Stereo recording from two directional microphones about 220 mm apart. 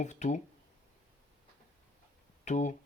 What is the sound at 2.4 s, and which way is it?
Speech, 35° left (ahead or behind).